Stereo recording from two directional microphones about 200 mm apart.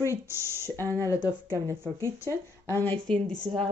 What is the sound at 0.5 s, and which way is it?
Speech, 10° right (ahead or behind).